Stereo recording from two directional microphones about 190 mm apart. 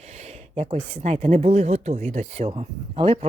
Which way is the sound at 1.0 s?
35° right (ahead or behind).